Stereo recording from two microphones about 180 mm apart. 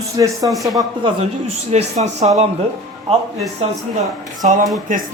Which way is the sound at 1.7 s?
40° right (ahead or behind).